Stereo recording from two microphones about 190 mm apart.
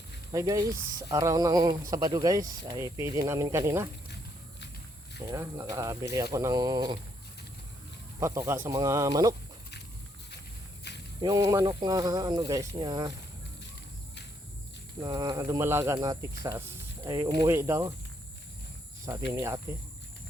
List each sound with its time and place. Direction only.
0.3 s speech: 15° right (ahead or behind)
5.2 s speech: 15° right (ahead or behind)
8.2 s speech: 15° right (ahead or behind)
10.9 s snake: 65° left (ahead or behind)
11.2 s speech: 20° right (ahead or behind)
15.0 s speech: 20° right (ahead or behind)
19.3 s speech: 15° right (ahead or behind)